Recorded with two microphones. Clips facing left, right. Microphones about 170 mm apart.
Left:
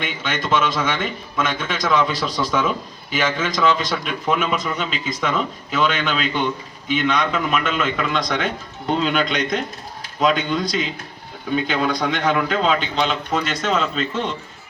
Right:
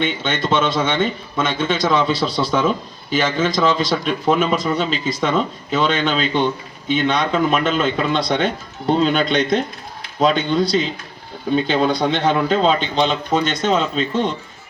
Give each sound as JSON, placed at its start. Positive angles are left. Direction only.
{"t": 0.0, "sound": "speech", "side_deg": -30}